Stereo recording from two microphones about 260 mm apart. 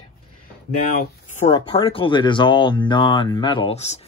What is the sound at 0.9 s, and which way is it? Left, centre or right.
Speech, left.